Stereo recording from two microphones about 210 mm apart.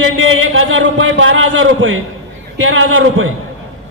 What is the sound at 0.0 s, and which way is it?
A man's voice, 70° right (ahead or behind).